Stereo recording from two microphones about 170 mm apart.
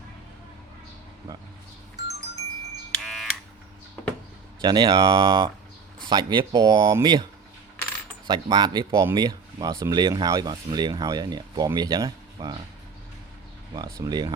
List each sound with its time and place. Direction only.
2.9 s buzzer: centre (ahead or behind)
4.6 s speech: 25° right (ahead or behind)
8.3 s speech: 25° right (ahead or behind)
13.7 s speech: 20° right (ahead or behind)